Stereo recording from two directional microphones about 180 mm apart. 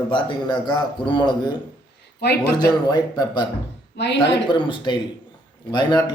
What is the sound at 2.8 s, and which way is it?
Speech, 20° left (ahead or behind).